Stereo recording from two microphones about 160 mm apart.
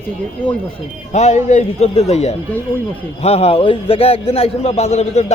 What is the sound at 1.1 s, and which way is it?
A man's voice, 45° left (ahead or behind).